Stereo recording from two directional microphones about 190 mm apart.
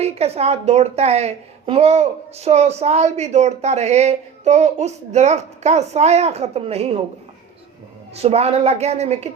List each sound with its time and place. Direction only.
0.0 s a woman's voice: 35° right (ahead or behind)
8.1 s a woman's voice: 35° right (ahead or behind)